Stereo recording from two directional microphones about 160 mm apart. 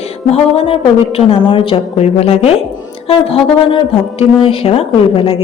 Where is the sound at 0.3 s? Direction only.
40° left (ahead or behind).